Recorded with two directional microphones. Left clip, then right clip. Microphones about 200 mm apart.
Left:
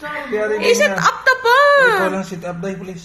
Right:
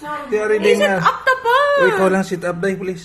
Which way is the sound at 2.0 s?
55° right (ahead or behind).